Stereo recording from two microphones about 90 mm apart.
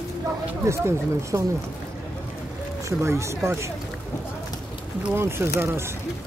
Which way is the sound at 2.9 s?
30° right (ahead or behind).